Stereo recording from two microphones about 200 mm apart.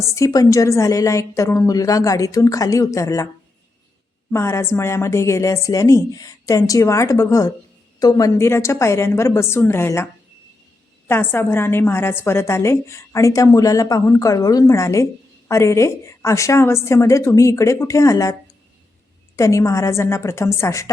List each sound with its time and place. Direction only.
0.0 s a woman's voice: 15° left (ahead or behind)
4.3 s a woman's voice: 15° left (ahead or behind)
11.1 s a woman's voice: 10° left (ahead or behind)
19.4 s a woman's voice: 15° left (ahead or behind)